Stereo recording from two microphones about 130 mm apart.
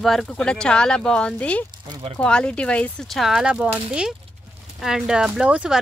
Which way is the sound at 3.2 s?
5° right (ahead or behind).